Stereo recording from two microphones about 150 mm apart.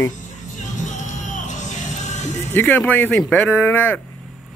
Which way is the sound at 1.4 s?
55° left (ahead or behind).